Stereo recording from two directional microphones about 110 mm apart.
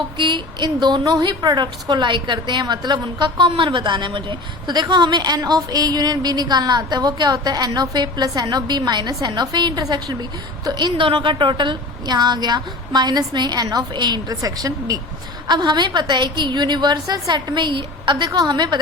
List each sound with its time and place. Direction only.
0.2 s a woman's voice: 45° right (ahead or behind)